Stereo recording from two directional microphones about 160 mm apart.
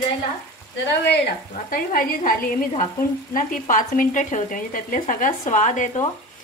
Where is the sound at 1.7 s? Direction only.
65° left (ahead or behind).